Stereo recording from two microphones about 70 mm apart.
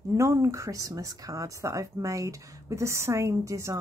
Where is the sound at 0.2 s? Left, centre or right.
Right.